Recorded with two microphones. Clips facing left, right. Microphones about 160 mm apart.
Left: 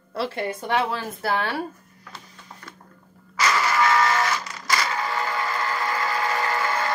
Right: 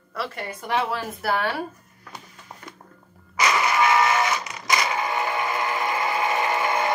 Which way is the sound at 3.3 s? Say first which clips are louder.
Right 1 dB; 20° right (ahead or behind).